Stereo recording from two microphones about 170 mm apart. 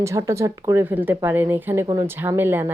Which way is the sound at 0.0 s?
15° right (ahead or behind).